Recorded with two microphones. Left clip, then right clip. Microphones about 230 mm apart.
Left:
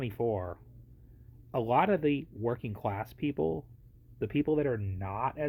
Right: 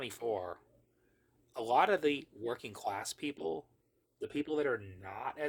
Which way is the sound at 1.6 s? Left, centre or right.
Centre.